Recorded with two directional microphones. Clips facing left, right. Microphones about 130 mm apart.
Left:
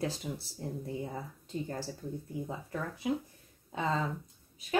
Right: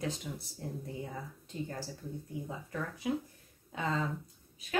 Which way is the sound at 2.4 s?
30° left (ahead or behind).